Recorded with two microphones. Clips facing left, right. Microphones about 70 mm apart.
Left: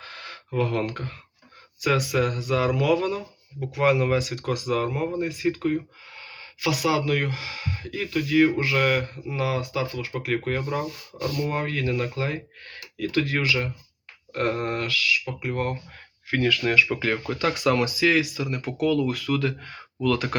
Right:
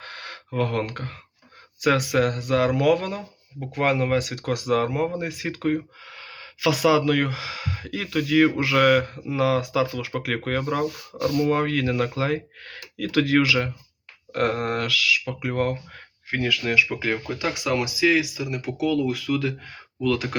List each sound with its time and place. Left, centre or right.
0.0 s gasp: right
1.8 s speech: right
3.2 s speech: right
14.3 s speech: right
16.4 s speech: centre